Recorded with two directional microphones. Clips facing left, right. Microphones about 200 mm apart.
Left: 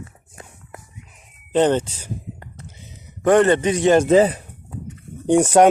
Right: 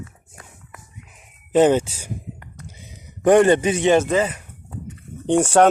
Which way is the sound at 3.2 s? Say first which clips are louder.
Right 1 dB; 15° right (ahead or behind).